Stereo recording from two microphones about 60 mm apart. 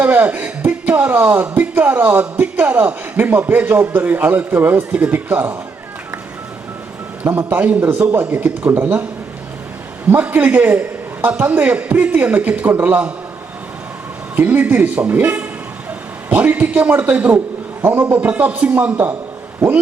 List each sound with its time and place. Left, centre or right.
0.0 s speech: right
7.3 s speech: right
10.1 s speech: right
14.3 s speech: right